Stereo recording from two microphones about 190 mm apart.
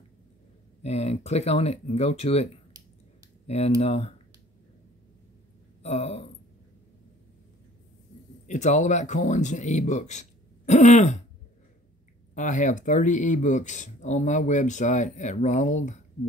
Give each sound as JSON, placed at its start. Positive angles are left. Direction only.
{"t": 0.8, "sound": "speech", "side_deg": 35}
{"t": 3.4, "sound": "speech", "side_deg": 35}
{"t": 5.8, "sound": "speech", "side_deg": 35}
{"t": 8.5, "sound": "speech", "side_deg": 40}
{"t": 12.4, "sound": "speech", "side_deg": 40}